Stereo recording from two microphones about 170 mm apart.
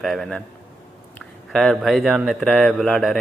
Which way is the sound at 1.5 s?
5° left (ahead or behind).